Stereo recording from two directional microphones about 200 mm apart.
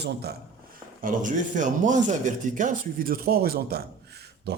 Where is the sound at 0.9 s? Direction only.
40° right (ahead or behind).